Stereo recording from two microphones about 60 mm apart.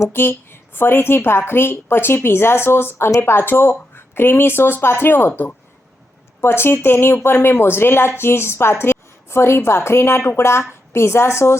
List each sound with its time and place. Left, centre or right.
0.1 s a woman's voice: left
6.4 s speech: left